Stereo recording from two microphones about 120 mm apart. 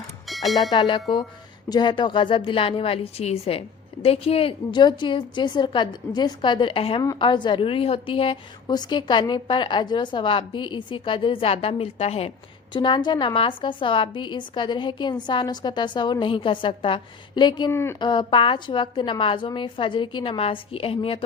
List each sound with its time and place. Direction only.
0.3 s bell: centre (ahead or behind)
0.7 s a woman's voice: 40° left (ahead or behind)
12.7 s a woman's voice: 40° left (ahead or behind)
17.7 s a woman's voice: 20° left (ahead or behind)
18.0 s a woman's voice: 40° left (ahead or behind)